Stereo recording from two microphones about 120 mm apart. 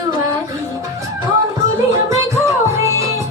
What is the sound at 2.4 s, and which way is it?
Music, 25° right (ahead or behind).